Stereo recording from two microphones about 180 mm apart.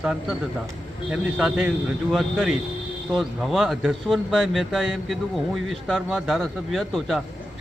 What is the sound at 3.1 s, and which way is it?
Speech, centre (ahead or behind).